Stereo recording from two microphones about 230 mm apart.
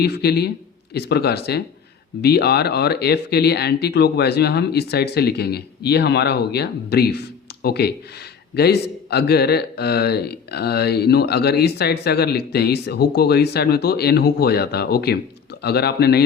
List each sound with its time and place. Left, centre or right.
0.0 s a man's voice: left